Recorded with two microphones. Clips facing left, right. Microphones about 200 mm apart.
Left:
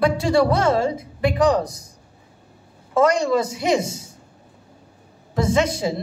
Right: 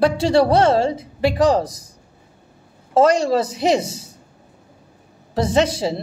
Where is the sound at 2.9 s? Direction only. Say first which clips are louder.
Right 2 dB; 30° right (ahead or behind).